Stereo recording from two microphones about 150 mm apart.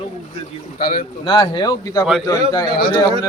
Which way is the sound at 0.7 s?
80° left.